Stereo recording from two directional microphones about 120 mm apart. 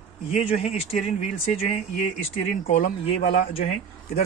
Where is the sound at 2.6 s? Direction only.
55° left (ahead or behind).